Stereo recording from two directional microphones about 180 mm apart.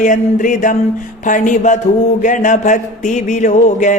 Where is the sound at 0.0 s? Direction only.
45° left (ahead or behind).